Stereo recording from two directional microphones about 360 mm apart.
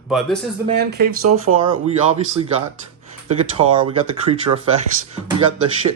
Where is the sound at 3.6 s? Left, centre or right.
Centre.